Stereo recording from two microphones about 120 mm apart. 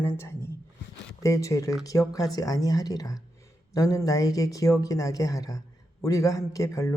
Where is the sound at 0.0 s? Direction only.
20° left (ahead or behind).